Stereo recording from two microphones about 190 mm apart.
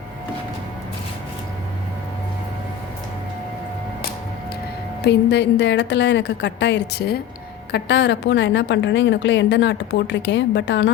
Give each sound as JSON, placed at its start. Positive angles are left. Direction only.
{"t": 5.0, "sound": "a woman's voice", "side_deg": 65}